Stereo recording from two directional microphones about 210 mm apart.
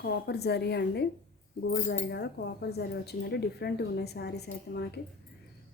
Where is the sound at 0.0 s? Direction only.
50° left (ahead or behind).